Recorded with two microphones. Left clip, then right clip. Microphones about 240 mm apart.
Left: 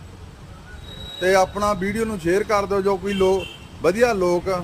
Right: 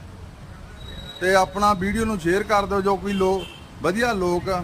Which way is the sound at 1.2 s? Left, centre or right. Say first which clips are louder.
Left 1 dB; centre.